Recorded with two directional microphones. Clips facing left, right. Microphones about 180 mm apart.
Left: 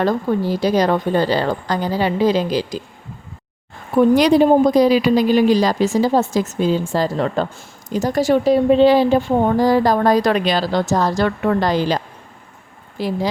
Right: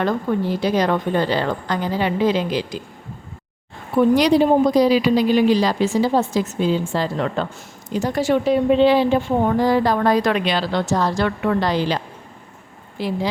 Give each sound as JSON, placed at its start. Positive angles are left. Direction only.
{"t": 0.0, "sound": "a woman's voice", "side_deg": 35}
{"t": 3.9, "sound": "a woman's voice", "side_deg": 50}